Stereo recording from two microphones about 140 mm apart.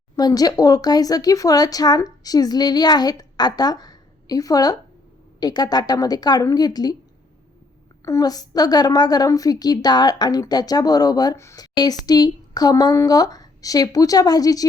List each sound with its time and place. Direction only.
0.2 s a woman's voice: 25° left (ahead or behind)
8.0 s a woman's voice: 25° left (ahead or behind)